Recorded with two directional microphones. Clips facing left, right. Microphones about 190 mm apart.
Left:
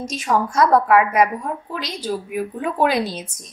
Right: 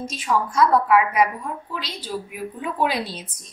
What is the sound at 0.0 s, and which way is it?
A woman's voice, 40° left (ahead or behind).